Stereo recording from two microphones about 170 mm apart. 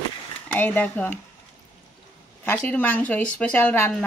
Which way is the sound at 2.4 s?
10° left (ahead or behind).